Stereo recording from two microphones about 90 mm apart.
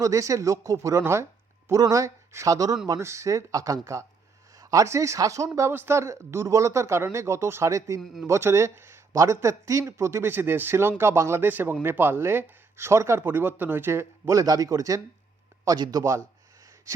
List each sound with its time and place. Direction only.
0.0 s speech: 35° right (ahead or behind)
14.3 s speech: 45° right (ahead or behind)